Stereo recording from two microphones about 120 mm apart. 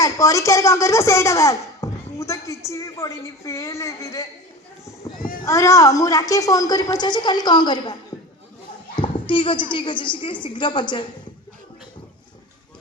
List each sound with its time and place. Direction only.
0.0 s speech: 25° left (ahead or behind)
5.0 s a sound: 30° left (ahead or behind)
5.5 s a woman's voice: 25° left (ahead or behind)
9.0 s a woman's voice: 45° left (ahead or behind)